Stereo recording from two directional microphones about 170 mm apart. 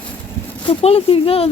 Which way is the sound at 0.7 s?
35° left (ahead or behind).